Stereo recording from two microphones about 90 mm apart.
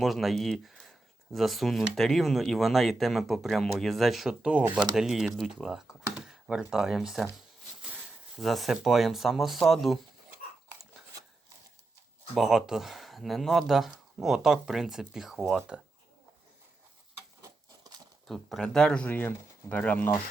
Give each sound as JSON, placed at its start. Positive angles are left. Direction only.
{"t": 0.0, "sound": "speech", "side_deg": 0}
{"t": 12.3, "sound": "speech", "side_deg": -5}
{"t": 18.3, "sound": "speech", "side_deg": 0}